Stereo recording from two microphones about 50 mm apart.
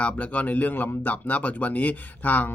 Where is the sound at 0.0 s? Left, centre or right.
Left.